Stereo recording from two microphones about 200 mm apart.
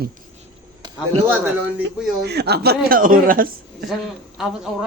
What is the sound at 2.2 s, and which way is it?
Speech, 55° right (ahead or behind).